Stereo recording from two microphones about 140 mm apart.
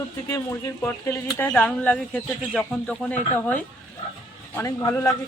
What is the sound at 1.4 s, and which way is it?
Speech, 5° left (ahead or behind).